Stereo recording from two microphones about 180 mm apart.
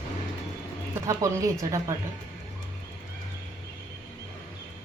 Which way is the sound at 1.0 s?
15° right (ahead or behind).